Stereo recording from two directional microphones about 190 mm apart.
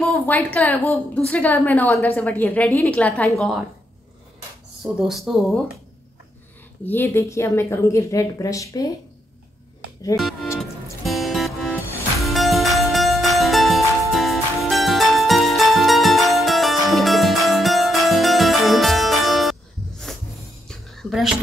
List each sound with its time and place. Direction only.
0.0 s a woman's voice: 10° left (ahead or behind)
4.9 s speech: centre (ahead or behind)
6.9 s a woman's voice: 10° left (ahead or behind)
10.1 s speech: centre (ahead or behind)
10.6 s music: centre (ahead or behind)
20.6 s whispering: centre (ahead or behind)